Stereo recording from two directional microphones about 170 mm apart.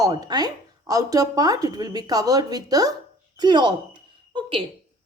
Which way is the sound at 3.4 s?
25° right (ahead or behind).